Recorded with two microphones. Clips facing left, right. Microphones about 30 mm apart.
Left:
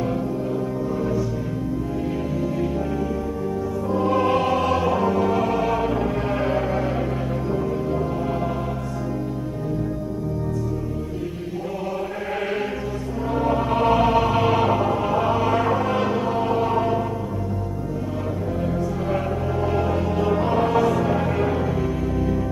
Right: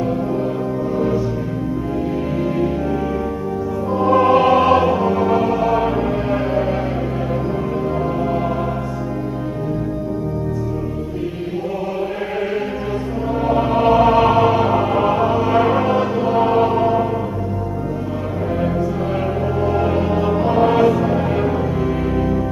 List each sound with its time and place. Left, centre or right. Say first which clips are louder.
0.9 s music: right 6 dB; right
3.9 s music: right 7 dB; centre
4.9 s music: right 4 dB; centre
13.4 s music: right 4 dB; centre
14.8 s music: right 5 dB; right
15.1 s music: right 4 dB; centre
15.6 s music: right 5 dB; right
15.9 s music: right 4 dB; centre
16.3 s music: right 6 dB; right
19.8 s music: right 4 dB; right
20.6 s music: right 8 dB; right
20.9 s music: right 4 dB; centre